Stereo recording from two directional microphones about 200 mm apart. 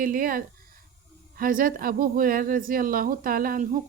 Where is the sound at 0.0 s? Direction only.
45° right (ahead or behind).